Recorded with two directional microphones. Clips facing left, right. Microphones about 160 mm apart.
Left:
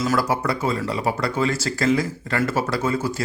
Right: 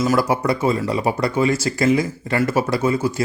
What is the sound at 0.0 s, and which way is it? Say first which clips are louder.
Speech: right 3 dB; 15° right (ahead or behind).